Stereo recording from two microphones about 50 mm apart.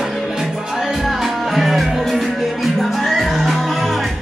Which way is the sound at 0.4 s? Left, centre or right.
Centre.